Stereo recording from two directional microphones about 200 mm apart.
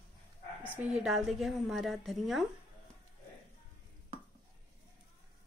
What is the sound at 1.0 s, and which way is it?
Speech, centre (ahead or behind).